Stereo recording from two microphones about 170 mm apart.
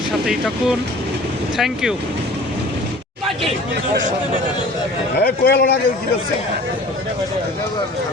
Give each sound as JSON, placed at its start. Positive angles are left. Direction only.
{"t": 0.3, "sound": "speech", "side_deg": -5}
{"t": 5.2, "sound": "a man's voice", "side_deg": 70}